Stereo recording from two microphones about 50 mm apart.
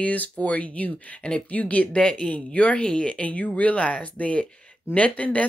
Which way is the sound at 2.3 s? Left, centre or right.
Left.